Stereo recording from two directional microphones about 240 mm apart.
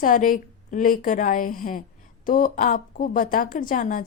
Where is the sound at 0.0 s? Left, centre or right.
Left.